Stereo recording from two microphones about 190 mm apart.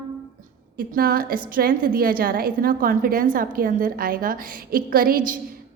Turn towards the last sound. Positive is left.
turn(degrees=-50)  # may be behind; listen again after turning